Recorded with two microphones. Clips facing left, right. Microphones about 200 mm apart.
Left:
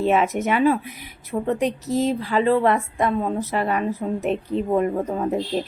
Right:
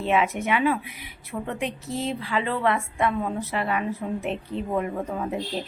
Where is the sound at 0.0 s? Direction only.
40° left (ahead or behind).